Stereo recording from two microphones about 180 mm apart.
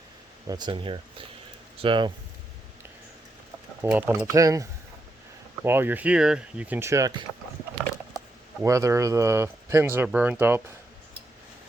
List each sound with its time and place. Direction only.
0.4 s speech: 25° right (ahead or behind)
3.8 s speech: 10° right (ahead or behind)
8.6 s speech: 15° right (ahead or behind)